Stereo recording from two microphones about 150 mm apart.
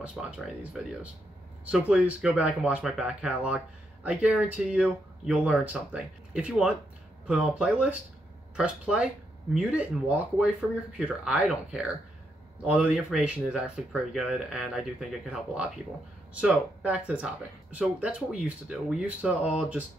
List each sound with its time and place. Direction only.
0.0 s speech: 5° right (ahead or behind)